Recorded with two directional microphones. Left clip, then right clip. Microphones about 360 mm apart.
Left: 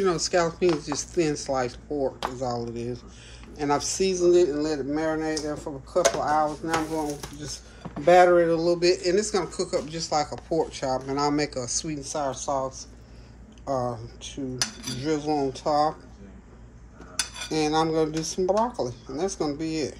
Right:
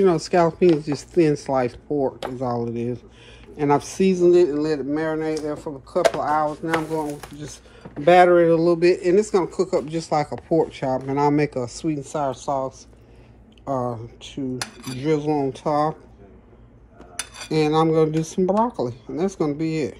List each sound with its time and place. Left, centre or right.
0.0 s speech: centre
11.4 s a man's voice: right
12.0 s speech: right
13.7 s speech: right
17.5 s speech: right